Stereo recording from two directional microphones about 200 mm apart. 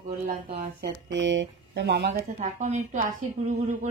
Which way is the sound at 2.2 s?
35° right (ahead or behind).